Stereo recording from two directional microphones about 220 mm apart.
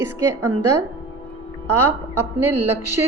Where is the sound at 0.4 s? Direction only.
90° right.